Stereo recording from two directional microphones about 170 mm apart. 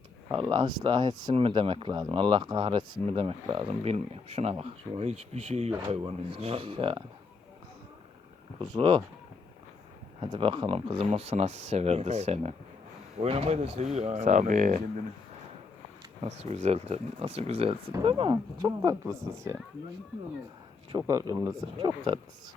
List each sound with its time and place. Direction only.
0.3 s speech: 30° right (ahead or behind)
8.5 s speech: 25° right (ahead or behind)
10.2 s speech: 30° right (ahead or behind); by 14.8 s 50° right (ahead or behind)
16.2 s speech: 40° right (ahead or behind); by 19.5 s 20° right (ahead or behind)
20.9 s speech: 20° right (ahead or behind)